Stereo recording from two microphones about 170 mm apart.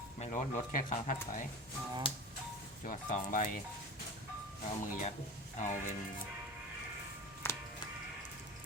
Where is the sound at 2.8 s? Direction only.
50° left (ahead or behind).